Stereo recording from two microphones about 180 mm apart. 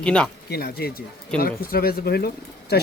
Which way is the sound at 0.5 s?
60° left (ahead or behind).